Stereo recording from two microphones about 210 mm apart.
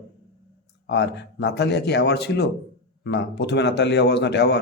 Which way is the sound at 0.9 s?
50° left (ahead or behind).